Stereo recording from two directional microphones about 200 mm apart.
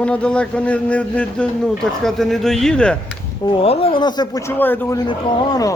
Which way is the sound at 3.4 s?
25° left (ahead or behind).